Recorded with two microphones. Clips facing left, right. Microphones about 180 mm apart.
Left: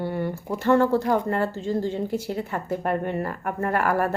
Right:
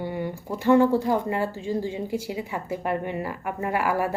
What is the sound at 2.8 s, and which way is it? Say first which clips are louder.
Speech: left 2 dB; 50° left (ahead or behind).